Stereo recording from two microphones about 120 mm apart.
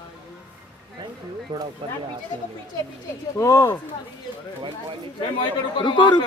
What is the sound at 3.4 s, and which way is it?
Speech, 25° left (ahead or behind).